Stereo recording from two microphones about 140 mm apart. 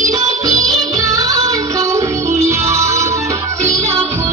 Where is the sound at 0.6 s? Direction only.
25° right (ahead or behind).